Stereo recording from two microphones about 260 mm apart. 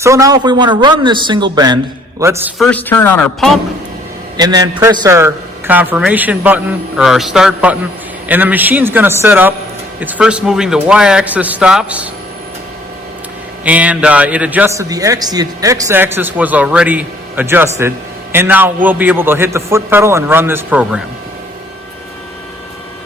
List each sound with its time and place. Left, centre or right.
0.0 s a man's voice: centre
2.6 s a man's voice: centre
4.4 s a man's voice: centre
13.7 s a man's voice: centre